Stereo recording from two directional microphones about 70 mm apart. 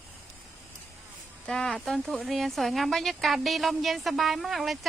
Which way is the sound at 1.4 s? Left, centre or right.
Centre.